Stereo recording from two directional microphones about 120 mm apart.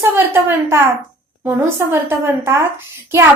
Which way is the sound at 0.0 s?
20° right (ahead or behind).